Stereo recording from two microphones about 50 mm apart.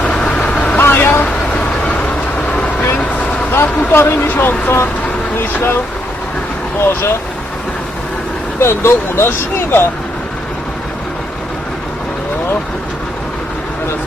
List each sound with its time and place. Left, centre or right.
0.1 s vehicle: left
0.8 s vehicle: left
2.5 s vehicle: left
3.5 s speech: left
8.6 s speech: left